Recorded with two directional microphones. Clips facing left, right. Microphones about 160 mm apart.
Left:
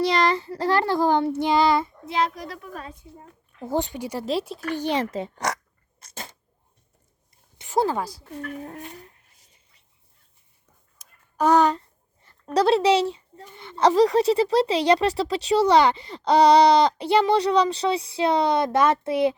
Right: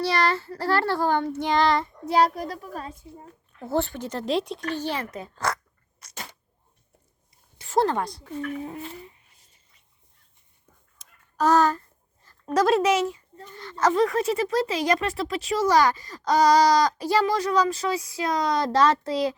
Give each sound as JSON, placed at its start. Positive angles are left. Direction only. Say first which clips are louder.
{"t": 0.0, "sound": "child singing", "louder": "left 3 dB", "side_deg": 15}
{"t": 2.0, "sound": "a child's voice", "louder": "right 4 dB", "side_deg": -40}
{"t": 3.6, "sound": "child singing", "louder": "even", "side_deg": 15}
{"t": 4.9, "sound": "speech", "louder": "left 6 dB", "side_deg": 25}
{"t": 7.6, "sound": "child singing", "louder": "even", "side_deg": 10}
{"t": 11.4, "sound": "a sound", "louder": "left 2 dB", "side_deg": 20}
{"t": 12.5, "sound": "speech", "louder": "left 2 dB", "side_deg": 30}
{"t": 13.4, "sound": "child singing", "louder": "right 4 dB", "side_deg": 10}
{"t": 13.7, "sound": "speech", "louder": "left 4 dB", "side_deg": 30}